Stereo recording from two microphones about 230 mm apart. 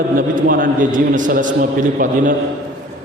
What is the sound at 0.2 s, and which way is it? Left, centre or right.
A man's voice, right.